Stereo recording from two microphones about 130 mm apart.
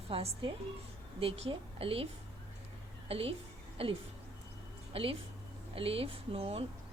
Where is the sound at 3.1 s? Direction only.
50° right (ahead or behind).